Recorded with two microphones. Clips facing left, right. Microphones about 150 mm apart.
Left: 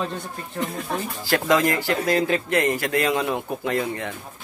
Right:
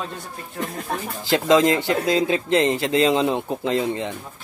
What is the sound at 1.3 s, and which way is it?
Speech, 20° right (ahead or behind).